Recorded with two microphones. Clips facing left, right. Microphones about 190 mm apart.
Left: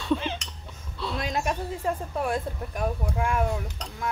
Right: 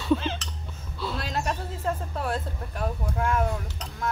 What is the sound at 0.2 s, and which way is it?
Chink, 15° left (ahead or behind).